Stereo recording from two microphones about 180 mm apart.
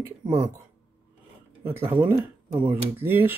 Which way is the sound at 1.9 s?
10° right (ahead or behind).